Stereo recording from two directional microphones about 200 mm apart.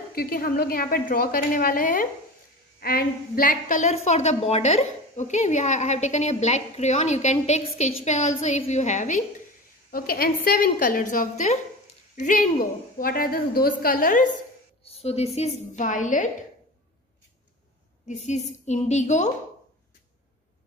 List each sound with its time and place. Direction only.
0.1 s a woman's voice: 50° left (ahead or behind)
9.8 s a woman's voice: 50° left (ahead or behind)
14.9 s a woman's voice: 30° left (ahead or behind)
18.0 s a woman's voice: 35° left (ahead or behind)